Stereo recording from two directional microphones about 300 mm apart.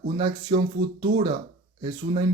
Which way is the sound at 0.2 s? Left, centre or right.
Centre.